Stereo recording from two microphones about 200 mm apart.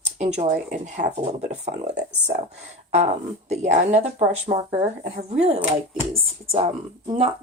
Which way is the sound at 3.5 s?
35° right (ahead or behind).